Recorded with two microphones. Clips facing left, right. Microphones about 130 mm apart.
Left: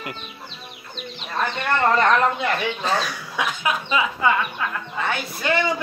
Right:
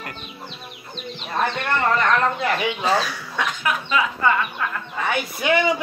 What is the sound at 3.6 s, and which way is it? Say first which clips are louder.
Speech: right 1 dB; 15° left (ahead or behind).